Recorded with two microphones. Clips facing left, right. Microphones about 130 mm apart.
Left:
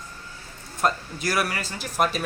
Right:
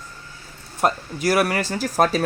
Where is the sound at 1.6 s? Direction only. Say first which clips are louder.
Right 9 dB; 90° right.